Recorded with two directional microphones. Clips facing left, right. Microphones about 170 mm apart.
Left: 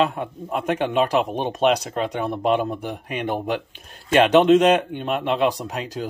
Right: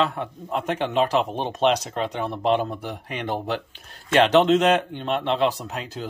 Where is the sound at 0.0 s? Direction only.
15° left (ahead or behind).